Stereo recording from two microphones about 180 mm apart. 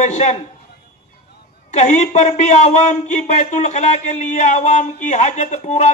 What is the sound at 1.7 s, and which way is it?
A man's voice, 40° left (ahead or behind).